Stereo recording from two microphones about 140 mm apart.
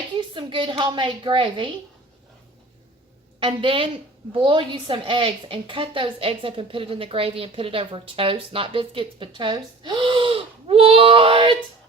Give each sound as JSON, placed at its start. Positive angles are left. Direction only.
{"t": 0.2, "sound": "a woman's voice", "side_deg": -35}
{"t": 3.4, "sound": "a woman's voice", "side_deg": -40}